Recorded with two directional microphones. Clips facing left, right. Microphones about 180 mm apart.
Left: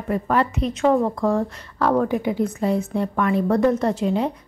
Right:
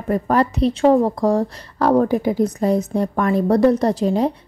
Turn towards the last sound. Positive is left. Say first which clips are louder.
# right 3 dB
turn(degrees=-35)  # may be behind; listen again after turning